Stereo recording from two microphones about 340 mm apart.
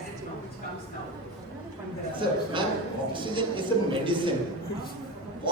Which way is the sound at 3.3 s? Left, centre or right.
Centre.